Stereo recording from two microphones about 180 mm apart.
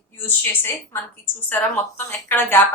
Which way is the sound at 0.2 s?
10° left (ahead or behind).